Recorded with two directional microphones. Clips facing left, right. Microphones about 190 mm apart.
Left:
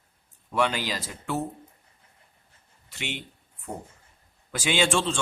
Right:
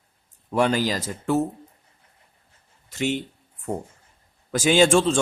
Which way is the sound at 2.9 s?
40° right (ahead or behind).